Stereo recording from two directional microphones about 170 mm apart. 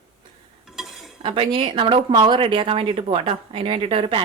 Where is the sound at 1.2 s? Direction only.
30° right (ahead or behind).